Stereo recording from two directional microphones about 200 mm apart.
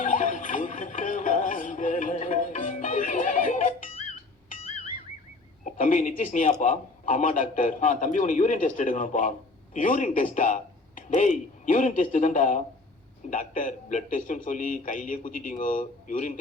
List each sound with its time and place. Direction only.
0.0 s music: 40° left (ahead or behind)
5.7 s speech: 40° left (ahead or behind)